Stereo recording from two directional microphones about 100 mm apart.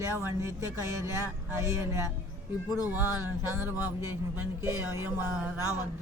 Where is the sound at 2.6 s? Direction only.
35° left (ahead or behind).